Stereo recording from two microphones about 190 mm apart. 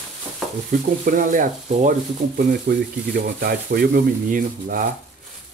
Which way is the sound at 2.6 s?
55° right (ahead or behind).